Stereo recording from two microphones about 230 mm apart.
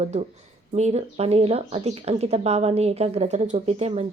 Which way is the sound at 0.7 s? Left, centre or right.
Right.